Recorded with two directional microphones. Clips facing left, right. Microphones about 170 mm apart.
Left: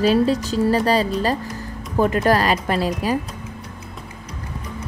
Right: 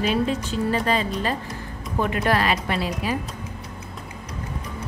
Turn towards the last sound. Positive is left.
turn(degrees=40)  # may be behind; listen again after turning